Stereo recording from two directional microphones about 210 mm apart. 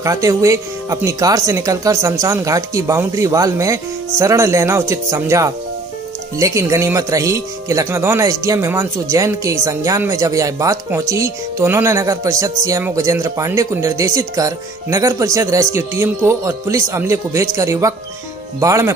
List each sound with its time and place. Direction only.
0.0 s speech: 15° right (ahead or behind)